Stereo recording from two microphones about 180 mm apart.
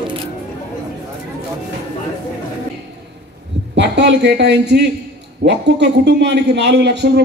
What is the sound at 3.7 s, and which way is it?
A man's voice, 75° right (ahead or behind).